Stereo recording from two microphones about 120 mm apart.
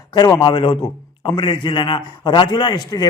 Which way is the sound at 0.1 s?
35° left (ahead or behind).